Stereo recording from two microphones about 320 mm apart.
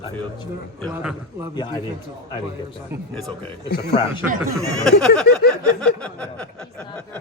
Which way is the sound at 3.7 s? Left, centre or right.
Left.